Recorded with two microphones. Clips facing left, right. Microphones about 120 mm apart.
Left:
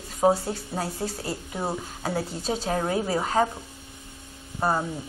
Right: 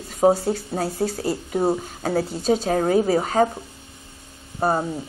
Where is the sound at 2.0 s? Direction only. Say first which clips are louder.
Right 8 dB; 60° right (ahead or behind).